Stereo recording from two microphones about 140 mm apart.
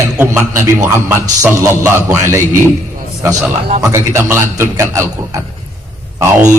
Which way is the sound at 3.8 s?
20° right (ahead or behind).